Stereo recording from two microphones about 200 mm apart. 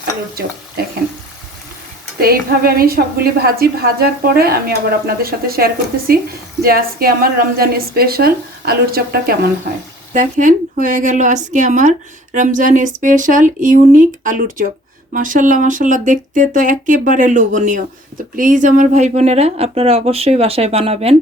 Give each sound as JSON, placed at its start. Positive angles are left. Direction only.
{"t": 0.0, "sound": "speech", "side_deg": -50}
{"t": 2.2, "sound": "a woman's voice", "side_deg": -50}
{"t": 10.1, "sound": "a woman's voice", "side_deg": -40}